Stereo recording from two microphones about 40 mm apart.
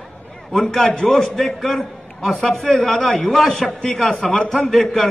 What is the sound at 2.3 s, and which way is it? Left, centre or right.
Speech, left.